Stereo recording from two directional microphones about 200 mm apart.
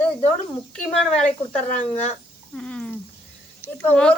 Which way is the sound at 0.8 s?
5° left (ahead or behind).